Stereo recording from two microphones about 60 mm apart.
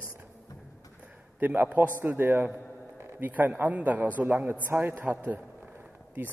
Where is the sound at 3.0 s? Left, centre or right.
Right.